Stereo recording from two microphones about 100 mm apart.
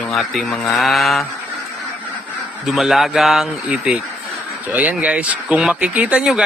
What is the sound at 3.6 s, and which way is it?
Speech, 10° right (ahead or behind).